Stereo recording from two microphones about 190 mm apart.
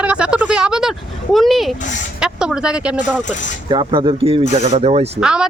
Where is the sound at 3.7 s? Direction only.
25° right (ahead or behind).